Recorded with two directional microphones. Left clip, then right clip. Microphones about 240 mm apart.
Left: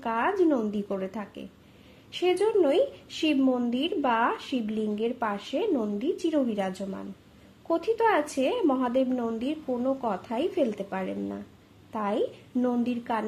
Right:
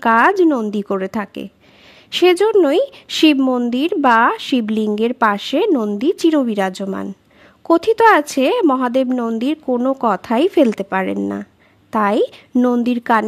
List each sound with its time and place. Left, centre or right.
0.0 s speech: right